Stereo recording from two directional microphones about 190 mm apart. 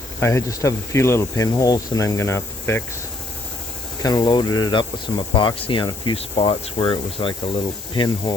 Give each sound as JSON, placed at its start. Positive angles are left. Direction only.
{"t": 0.2, "sound": "speech", "side_deg": 15}
{"t": 4.0, "sound": "speech", "side_deg": 20}